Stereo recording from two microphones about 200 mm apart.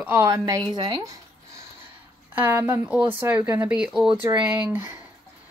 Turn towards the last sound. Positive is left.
turn(degrees=-10)  # may be behind; listen again after turning